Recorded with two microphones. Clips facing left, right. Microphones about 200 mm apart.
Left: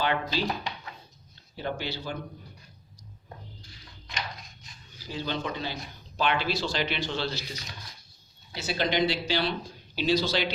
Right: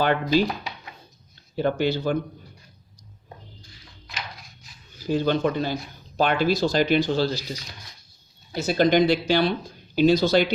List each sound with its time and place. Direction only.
0.0 s speech: 50° right (ahead or behind)
1.5 s speech: 50° right (ahead or behind)
4.0 s a sound: 5° right (ahead or behind)
5.0 s speech: 50° right (ahead or behind)
8.5 s speech: 45° right (ahead or behind)